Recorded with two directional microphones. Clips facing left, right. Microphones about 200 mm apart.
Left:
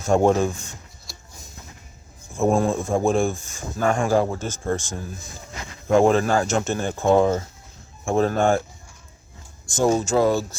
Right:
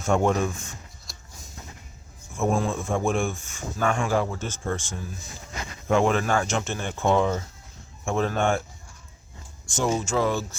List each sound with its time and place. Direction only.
0.1 s speech: 35° left (ahead or behind)
2.6 s speech: 35° left (ahead or behind)
6.5 s speech: 45° left (ahead or behind)
9.6 s speech: 40° left (ahead or behind)